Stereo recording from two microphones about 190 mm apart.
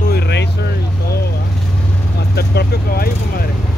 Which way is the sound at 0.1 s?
60° left (ahead or behind).